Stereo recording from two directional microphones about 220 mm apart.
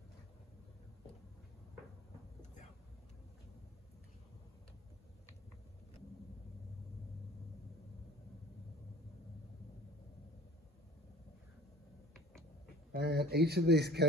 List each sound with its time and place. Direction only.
12.9 s speech: 45° right (ahead or behind)